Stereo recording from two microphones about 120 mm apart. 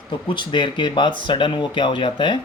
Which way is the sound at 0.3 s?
40° left (ahead or behind).